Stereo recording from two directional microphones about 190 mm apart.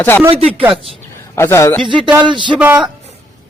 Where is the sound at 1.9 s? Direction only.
25° right (ahead or behind).